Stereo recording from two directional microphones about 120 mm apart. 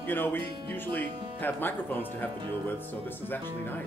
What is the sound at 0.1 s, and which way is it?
Speech, 15° left (ahead or behind).